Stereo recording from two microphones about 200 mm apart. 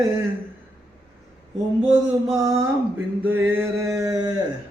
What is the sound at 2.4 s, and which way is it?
Male singing, 15° right (ahead or behind).